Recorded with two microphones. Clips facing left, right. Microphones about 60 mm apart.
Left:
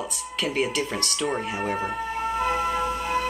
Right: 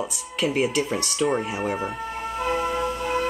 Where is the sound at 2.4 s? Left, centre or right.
Centre.